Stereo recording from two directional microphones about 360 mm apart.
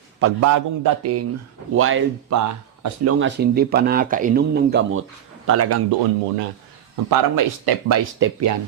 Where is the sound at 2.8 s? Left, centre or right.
Right.